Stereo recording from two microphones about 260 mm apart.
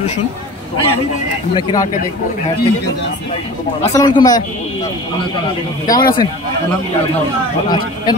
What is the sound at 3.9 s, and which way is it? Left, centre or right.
Speech, centre.